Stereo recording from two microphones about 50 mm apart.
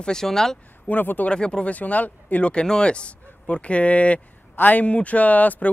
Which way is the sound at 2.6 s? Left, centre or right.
Centre.